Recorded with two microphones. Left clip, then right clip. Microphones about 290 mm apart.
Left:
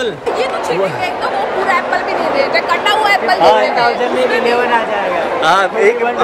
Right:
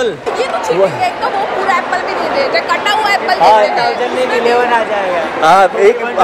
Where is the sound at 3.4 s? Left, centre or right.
Centre.